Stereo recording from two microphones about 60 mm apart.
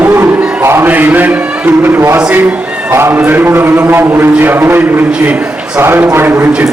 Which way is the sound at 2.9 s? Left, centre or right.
Right.